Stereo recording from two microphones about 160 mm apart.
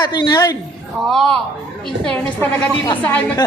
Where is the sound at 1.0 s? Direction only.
Centre (ahead or behind).